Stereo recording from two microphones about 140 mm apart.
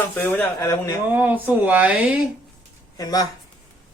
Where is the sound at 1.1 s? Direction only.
10° right (ahead or behind).